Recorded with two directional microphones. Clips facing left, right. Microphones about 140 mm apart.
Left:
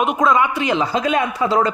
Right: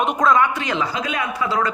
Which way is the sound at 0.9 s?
35° left (ahead or behind).